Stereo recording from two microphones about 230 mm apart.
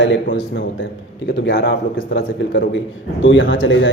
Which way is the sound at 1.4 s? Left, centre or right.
Left.